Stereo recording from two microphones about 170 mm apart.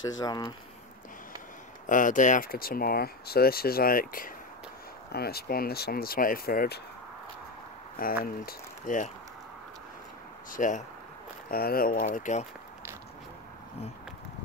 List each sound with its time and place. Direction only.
0.2 s speech: 25° left (ahead or behind)
1.9 s speech: 50° left (ahead or behind)
5.1 s speech: 65° left (ahead or behind)
8.0 s speech: 55° left (ahead or behind)
10.5 s speech: 45° left (ahead or behind)
11.5 s speech: 60° left (ahead or behind); by 12.4 s 45° left (ahead or behind)